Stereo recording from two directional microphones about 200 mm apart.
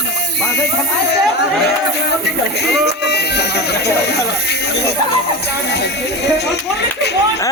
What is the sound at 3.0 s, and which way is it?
Speech, 55° left (ahead or behind).